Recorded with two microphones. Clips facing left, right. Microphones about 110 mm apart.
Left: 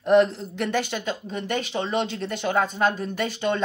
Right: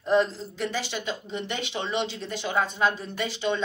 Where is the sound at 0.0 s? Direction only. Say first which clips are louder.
Left 5 dB; 60° left (ahead or behind).